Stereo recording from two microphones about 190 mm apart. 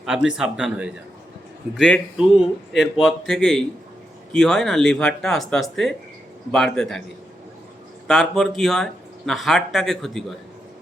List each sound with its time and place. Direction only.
0.0 s speech: 5° right (ahead or behind)
8.0 s speech: centre (ahead or behind)